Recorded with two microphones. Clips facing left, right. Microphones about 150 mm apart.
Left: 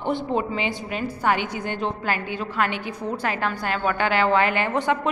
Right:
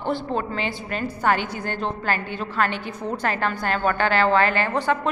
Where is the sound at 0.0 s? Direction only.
15° left (ahead or behind).